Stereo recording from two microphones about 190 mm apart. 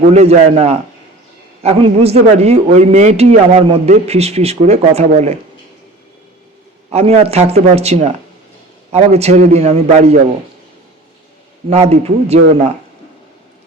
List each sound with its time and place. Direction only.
0.0 s a man's voice: 35° right (ahead or behind)
6.9 s a man's voice: 35° right (ahead or behind)
11.7 s a man's voice: 35° right (ahead or behind)